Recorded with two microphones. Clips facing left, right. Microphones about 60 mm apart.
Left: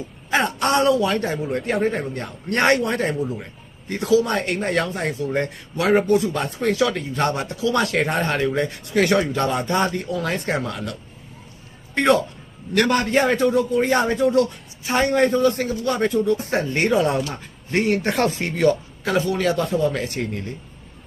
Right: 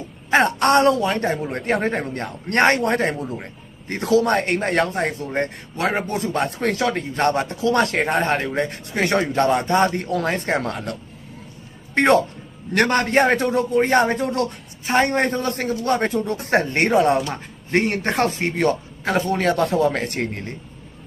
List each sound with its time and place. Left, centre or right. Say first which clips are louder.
0.3 s speech: right 4 dB; right
5.0 s speech: even; right
6.4 s speech: even; right
6.7 s speech: even; right
8.9 s speech: left 3 dB; right
10.2 s speech: right 1 dB; right
10.6 s speech: right 1 dB; right
11.9 s speech: right 2 dB; right